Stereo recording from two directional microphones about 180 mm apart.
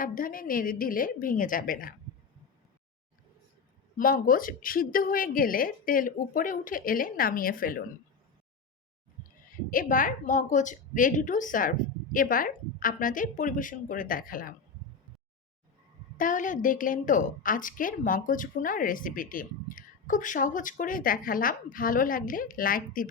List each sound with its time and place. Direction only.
0.0 s a woman's voice: 50° left (ahead or behind)
3.9 s a woman's voice: 50° left (ahead or behind)
9.5 s a woman's voice: 50° left (ahead or behind)
16.1 s a woman's voice: 45° left (ahead or behind)